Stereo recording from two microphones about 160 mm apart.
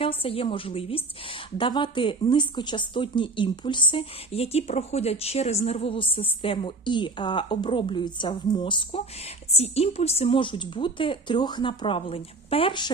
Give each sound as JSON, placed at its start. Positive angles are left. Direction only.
{"t": 0.0, "sound": "a woman's voice", "side_deg": 35}